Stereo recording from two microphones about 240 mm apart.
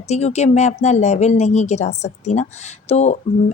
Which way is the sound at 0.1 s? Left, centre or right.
Left.